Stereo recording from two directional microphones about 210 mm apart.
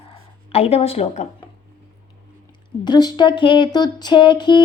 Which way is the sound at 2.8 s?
20° left (ahead or behind).